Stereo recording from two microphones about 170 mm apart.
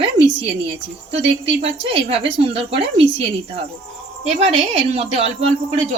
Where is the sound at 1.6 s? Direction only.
35° right (ahead or behind).